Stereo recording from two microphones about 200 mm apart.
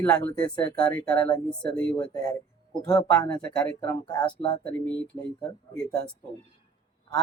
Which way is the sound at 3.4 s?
5° left (ahead or behind).